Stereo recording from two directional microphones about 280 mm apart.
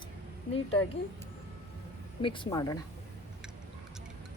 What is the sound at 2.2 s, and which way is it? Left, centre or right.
Speech, centre.